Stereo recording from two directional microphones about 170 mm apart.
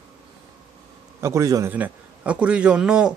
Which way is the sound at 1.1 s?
15° right (ahead or behind).